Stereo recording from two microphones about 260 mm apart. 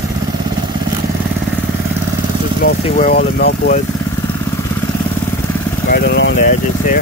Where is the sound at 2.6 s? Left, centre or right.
Left.